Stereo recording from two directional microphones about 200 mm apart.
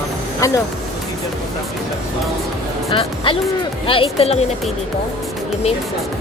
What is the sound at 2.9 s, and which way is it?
Speech, 25° left (ahead or behind).